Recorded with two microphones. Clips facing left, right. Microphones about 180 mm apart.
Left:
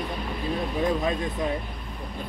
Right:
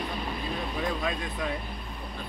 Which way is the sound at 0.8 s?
25° left (ahead or behind).